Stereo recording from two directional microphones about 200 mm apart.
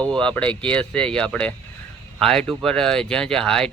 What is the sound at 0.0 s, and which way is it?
Speech, 5° left (ahead or behind).